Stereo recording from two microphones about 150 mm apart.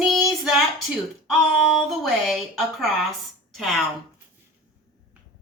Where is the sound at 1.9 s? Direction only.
Centre (ahead or behind).